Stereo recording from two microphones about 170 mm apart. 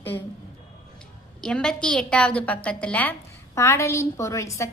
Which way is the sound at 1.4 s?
5° left (ahead or behind).